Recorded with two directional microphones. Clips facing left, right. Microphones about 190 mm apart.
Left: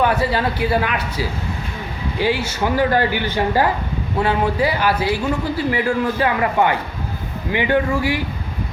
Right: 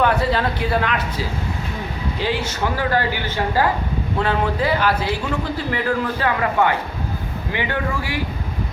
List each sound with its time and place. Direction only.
0.0 s a man's voice: 5° left (ahead or behind)
2.2 s a man's voice: 10° left (ahead or behind)